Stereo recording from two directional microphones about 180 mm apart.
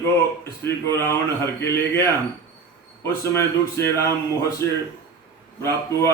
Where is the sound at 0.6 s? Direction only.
15° left (ahead or behind).